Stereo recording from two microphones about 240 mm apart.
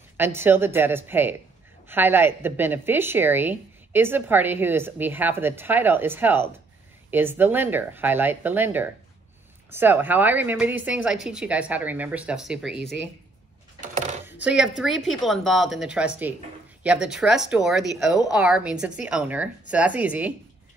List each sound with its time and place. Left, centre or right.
0.2 s a woman's voice: centre
13.7 s a sound: right
14.4 s speech: centre